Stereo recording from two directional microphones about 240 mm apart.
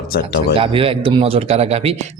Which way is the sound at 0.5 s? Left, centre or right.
Right.